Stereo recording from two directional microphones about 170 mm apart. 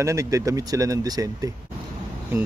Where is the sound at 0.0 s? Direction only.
15° right (ahead or behind).